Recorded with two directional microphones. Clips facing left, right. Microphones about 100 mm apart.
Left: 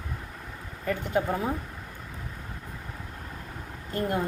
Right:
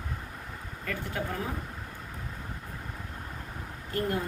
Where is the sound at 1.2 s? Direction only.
25° left (ahead or behind).